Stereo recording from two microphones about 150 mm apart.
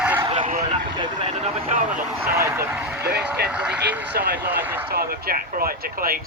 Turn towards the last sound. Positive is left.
turn(degrees=-75)  # may be behind; listen again after turning